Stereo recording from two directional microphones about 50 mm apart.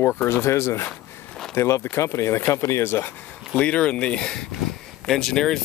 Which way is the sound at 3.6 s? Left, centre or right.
Left.